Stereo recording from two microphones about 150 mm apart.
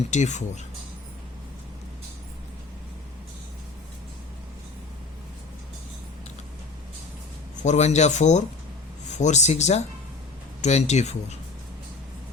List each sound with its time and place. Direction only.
0.1 s speech: 50° left (ahead or behind)
7.6 s speech: 50° left (ahead or behind)